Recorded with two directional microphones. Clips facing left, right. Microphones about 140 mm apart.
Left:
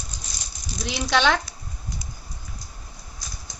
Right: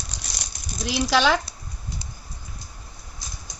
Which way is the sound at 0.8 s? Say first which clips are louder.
Right 1 dB; 5° right (ahead or behind).